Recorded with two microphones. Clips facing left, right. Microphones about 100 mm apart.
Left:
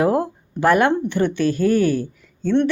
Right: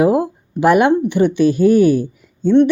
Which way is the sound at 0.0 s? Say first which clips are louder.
Right 4 dB; 10° right (ahead or behind).